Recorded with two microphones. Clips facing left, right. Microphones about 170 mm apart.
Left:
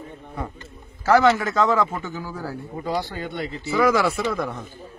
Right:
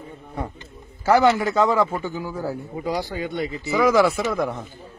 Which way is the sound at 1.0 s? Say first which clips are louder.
Even; 10° right (ahead or behind).